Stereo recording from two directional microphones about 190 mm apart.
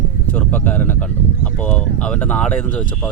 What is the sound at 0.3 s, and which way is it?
Speech, 10° left (ahead or behind).